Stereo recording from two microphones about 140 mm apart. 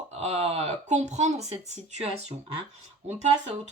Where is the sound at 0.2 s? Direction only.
50° right (ahead or behind).